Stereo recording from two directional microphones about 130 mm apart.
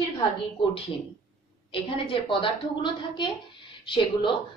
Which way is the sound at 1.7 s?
45° left (ahead or behind).